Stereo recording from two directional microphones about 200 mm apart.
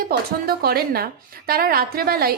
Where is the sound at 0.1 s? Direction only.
50° right (ahead or behind).